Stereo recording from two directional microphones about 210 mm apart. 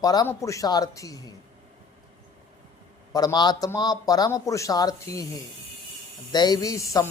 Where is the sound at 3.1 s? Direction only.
20° left (ahead or behind).